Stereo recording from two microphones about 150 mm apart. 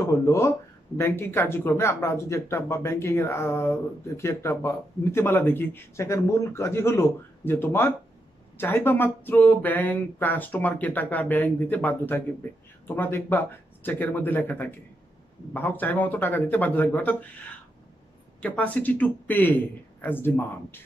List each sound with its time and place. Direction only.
0.0 s speech: 20° left (ahead or behind)
18.4 s speech: 10° left (ahead or behind)